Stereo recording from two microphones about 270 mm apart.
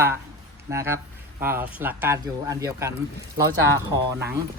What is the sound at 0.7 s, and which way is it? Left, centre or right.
Speech, centre.